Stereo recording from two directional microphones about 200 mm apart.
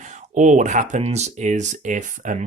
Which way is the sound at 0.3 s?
40° right (ahead or behind).